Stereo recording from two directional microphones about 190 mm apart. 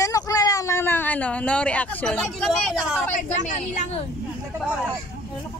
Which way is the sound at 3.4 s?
40° left (ahead or behind).